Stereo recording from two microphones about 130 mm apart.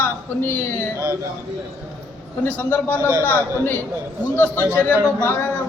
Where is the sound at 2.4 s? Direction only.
15° left (ahead or behind).